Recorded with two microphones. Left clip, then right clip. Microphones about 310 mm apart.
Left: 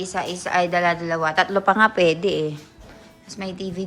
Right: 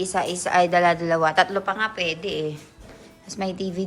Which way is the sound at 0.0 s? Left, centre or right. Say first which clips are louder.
Right 2 dB; centre.